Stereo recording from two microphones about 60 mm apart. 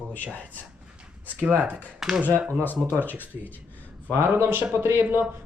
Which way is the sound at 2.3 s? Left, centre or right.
Left.